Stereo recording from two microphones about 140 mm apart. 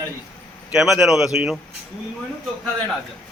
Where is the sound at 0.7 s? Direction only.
5° right (ahead or behind).